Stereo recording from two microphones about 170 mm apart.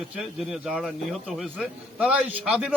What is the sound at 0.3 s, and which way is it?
A man's voice, 5° right (ahead or behind).